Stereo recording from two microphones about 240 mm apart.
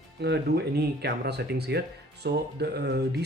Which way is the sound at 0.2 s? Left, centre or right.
Right.